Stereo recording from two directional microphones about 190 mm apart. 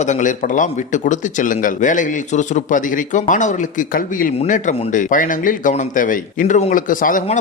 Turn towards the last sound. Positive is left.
turn(degrees=45)  # may be behind; listen again after turning